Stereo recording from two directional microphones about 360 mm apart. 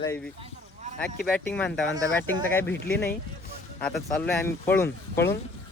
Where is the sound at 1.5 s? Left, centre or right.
Centre.